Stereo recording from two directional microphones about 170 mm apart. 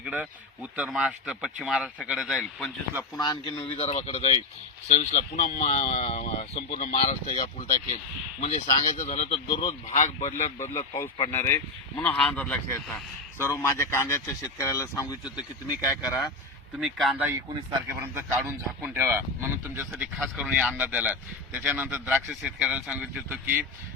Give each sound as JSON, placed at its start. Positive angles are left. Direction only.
{"t": 0.0, "sound": "speech", "side_deg": -5}
{"t": 3.2, "sound": "speech", "side_deg": 25}
{"t": 8.4, "sound": "speech", "side_deg": 40}
{"t": 11.3, "sound": "speech", "side_deg": 15}
{"t": 15.2, "sound": "speech", "side_deg": -5}
{"t": 18.0, "sound": "speech", "side_deg": -15}